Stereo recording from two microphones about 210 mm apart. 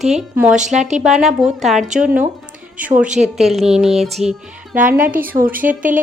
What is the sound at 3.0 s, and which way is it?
Speech, 35° right (ahead or behind).